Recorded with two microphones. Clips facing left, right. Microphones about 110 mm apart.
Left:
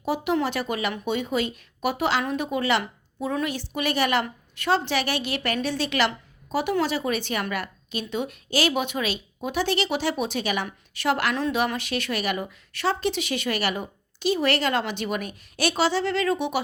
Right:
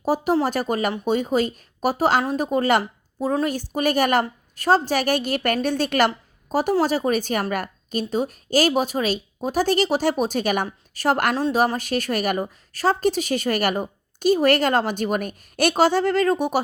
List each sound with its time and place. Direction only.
0.0 s a woman's voice: 40° right (ahead or behind)